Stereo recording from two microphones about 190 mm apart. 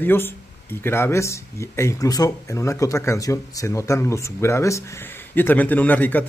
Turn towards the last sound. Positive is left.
turn(degrees=10)  # may be behind; listen again after turning